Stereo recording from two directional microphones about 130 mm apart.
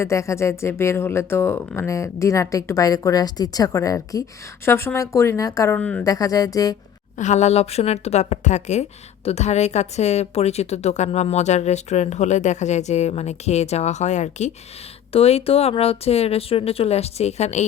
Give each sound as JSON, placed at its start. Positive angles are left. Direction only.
{"t": 0.0, "sound": "speech", "side_deg": 20}
{"t": 5.7, "sound": "speech", "side_deg": 10}
{"t": 6.0, "sound": "speech", "side_deg": 25}
{"t": 7.2, "sound": "a woman's voice", "side_deg": 60}
{"t": 15.1, "sound": "speech", "side_deg": 50}